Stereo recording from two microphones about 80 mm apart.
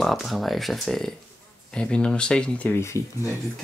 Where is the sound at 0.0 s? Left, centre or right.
Centre.